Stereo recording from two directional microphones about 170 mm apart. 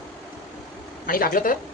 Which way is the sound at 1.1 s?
55° left (ahead or behind).